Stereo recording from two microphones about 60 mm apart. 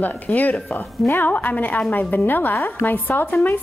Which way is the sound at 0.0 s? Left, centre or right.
Left.